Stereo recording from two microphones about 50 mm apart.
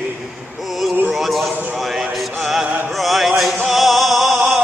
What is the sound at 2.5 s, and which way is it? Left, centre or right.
Music, centre.